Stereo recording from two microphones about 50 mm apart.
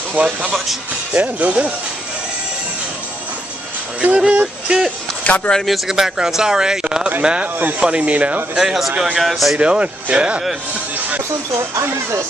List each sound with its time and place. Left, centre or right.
0.1 s speech: right
4.0 s speech: right
5.2 s speech: left
5.7 s speech: centre; by 8.4 s right
8.5 s speech: centre
9.6 s speech: right